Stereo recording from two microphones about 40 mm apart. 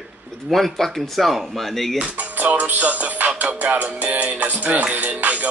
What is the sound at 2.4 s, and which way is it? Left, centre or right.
Music, right.